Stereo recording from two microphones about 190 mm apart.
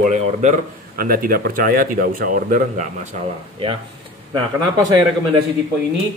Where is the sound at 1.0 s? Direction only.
50° right (ahead or behind).